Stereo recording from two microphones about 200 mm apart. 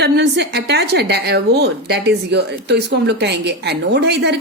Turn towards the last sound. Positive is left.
turn(degrees=-55)  # may be behind; listen again after turning